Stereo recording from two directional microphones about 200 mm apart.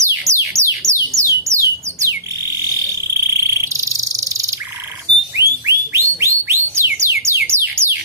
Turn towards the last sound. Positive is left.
turn(degrees=-10)  # may be behind; listen again after turning